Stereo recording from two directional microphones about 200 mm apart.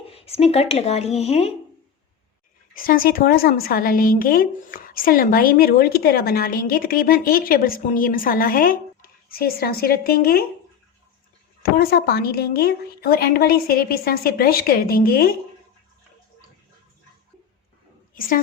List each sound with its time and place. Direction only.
0.1 s speech: 30° left (ahead or behind)
2.7 s a woman's voice: 45° left (ahead or behind)
11.6 s a woman's voice: 50° left (ahead or behind)
18.1 s a woman's voice: 45° left (ahead or behind)